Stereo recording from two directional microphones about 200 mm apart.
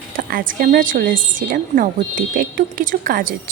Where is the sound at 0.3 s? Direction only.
45° right (ahead or behind).